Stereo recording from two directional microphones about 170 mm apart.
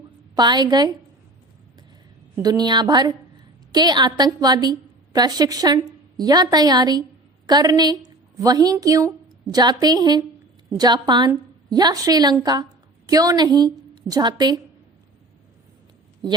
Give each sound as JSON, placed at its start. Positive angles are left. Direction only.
{"t": 0.3, "sound": "a woman's voice", "side_deg": -25}
{"t": 2.3, "sound": "a woman's voice", "side_deg": -25}